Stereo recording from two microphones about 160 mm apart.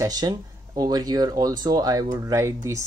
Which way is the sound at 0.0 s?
25° right (ahead or behind).